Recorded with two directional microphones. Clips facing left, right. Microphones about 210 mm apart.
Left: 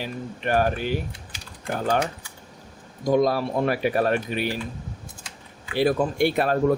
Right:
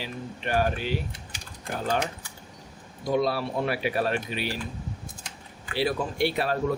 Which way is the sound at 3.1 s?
45° left (ahead or behind).